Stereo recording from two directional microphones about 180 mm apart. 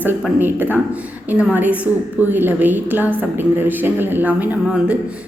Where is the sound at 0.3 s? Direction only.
10° right (ahead or behind).